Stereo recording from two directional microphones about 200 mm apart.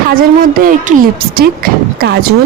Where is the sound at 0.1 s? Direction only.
45° right (ahead or behind).